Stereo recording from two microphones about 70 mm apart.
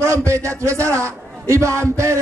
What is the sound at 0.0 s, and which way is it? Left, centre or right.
Speech, right.